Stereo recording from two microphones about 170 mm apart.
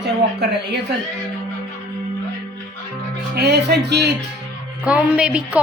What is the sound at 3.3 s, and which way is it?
Speech, 70° right (ahead or behind).